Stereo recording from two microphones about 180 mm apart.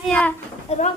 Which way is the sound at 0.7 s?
40° left (ahead or behind).